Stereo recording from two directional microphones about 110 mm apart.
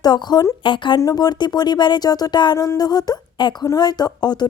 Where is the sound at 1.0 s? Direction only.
35° left (ahead or behind).